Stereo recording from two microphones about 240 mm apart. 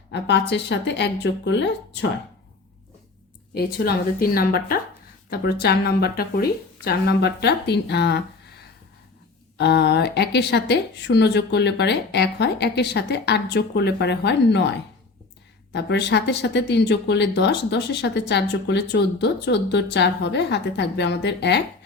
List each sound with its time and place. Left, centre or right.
0.1 s speech: left
3.5 s a woman's voice: left
9.6 s speech: left
15.7 s speech: left